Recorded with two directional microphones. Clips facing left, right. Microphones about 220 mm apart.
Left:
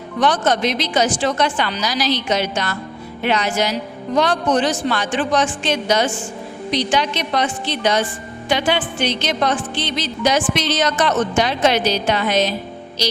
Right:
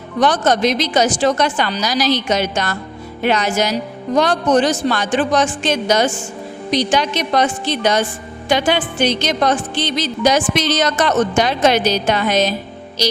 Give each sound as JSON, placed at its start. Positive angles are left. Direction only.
{"t": 0.2, "sound": "music", "side_deg": -40}